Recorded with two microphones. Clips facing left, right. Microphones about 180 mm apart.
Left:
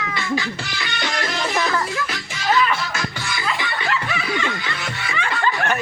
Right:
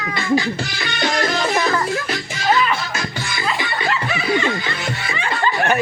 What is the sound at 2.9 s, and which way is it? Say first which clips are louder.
Music: right 1 dB; 40° right (ahead or behind).